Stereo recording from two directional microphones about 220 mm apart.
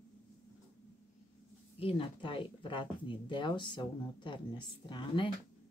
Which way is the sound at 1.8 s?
25° left (ahead or behind).